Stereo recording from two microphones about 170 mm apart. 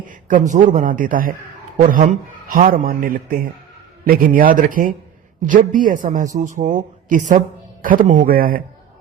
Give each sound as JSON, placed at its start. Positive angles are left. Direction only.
{"t": 0.1, "sound": "speech", "side_deg": -50}
{"t": 2.5, "sound": "a man's voice", "side_deg": -55}